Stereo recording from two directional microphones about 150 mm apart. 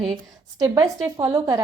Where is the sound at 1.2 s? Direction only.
20° right (ahead or behind).